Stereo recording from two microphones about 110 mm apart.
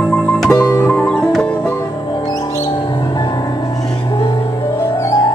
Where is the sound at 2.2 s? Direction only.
30° left (ahead or behind).